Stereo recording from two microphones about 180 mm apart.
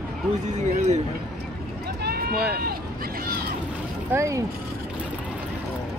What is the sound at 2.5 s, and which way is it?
Speech, 55° right (ahead or behind).